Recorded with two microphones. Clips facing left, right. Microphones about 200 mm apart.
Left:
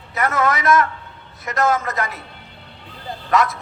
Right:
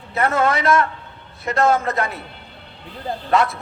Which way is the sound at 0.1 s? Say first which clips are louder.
Right 1 dB; 30° right (ahead or behind).